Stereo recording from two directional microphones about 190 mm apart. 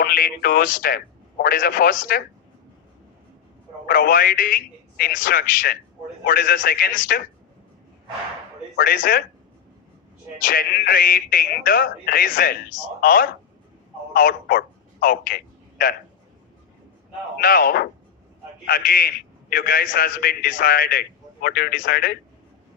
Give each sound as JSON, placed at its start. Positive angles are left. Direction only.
{"t": 0.0, "sound": "a man's voice", "side_deg": 50}
{"t": 3.8, "sound": "a man's voice", "side_deg": 50}
{"t": 8.7, "sound": "a man's voice", "side_deg": 50}
{"t": 10.4, "sound": "a man's voice", "side_deg": 50}
{"t": 17.4, "sound": "a man's voice", "side_deg": 50}